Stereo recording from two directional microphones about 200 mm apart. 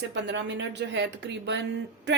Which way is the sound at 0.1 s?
65° right (ahead or behind).